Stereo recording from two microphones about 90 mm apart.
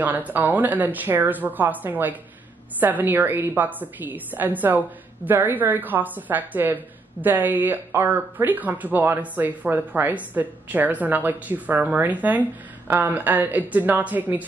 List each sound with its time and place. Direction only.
0.0 s a woman's voice: 20° right (ahead or behind)